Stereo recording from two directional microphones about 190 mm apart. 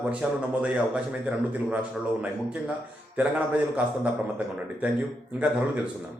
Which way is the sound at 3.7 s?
5° right (ahead or behind).